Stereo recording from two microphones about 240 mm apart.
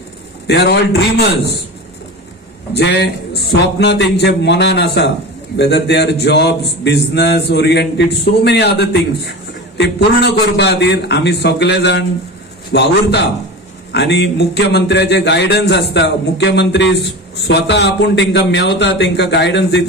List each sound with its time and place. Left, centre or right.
0.5 s a man's voice: left
2.7 s a man's voice: left